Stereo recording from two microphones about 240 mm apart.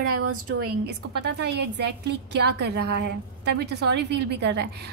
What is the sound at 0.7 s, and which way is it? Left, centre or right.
A woman's voice, right.